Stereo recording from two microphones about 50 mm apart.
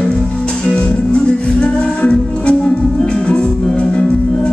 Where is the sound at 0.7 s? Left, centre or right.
Left.